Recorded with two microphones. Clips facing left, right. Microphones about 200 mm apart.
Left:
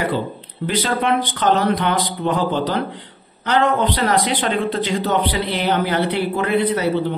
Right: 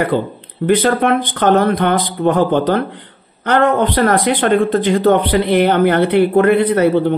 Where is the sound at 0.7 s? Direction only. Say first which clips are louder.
Right 7 dB; 55° right (ahead or behind).